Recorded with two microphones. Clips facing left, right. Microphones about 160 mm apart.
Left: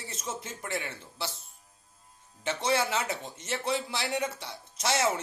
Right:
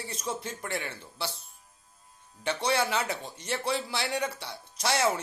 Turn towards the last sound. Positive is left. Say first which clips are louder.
# even
turn(degrees=25)  # may be behind; listen again after turning